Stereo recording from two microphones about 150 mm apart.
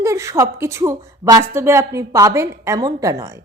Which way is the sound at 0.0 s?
20° right (ahead or behind).